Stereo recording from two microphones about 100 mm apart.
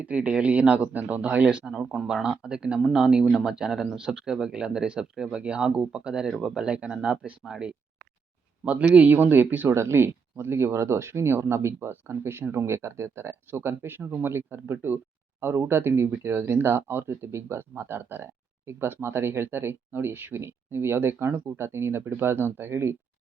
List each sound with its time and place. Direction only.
0.0 s speech: 15° right (ahead or behind)